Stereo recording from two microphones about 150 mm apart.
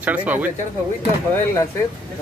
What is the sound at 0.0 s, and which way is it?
Speech, 10° right (ahead or behind).